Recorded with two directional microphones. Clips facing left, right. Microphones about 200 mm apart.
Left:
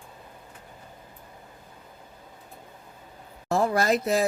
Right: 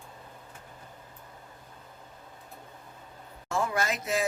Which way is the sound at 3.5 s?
35° left (ahead or behind).